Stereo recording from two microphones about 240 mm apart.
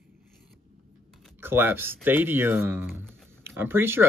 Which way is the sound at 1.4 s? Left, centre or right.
Centre.